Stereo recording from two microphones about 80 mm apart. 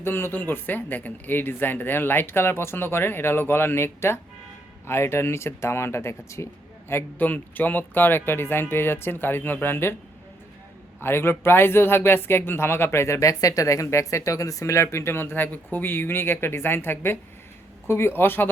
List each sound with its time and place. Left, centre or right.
0.0 s speech: left
11.0 s speech: left